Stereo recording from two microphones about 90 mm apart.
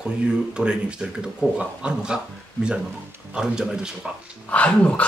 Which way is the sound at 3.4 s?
5° right (ahead or behind).